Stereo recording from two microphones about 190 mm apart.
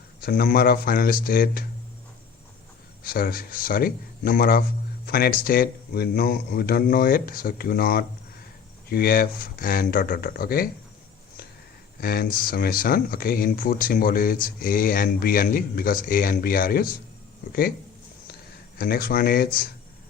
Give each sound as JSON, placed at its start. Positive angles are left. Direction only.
{"t": 0.2, "sound": "speech", "side_deg": 50}
{"t": 3.0, "sound": "speech", "side_deg": 50}
{"t": 11.9, "sound": "speech", "side_deg": 50}
{"t": 18.8, "sound": "speech", "side_deg": 50}